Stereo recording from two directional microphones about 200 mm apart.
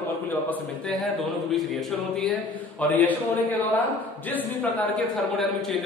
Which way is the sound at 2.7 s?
10° left (ahead or behind).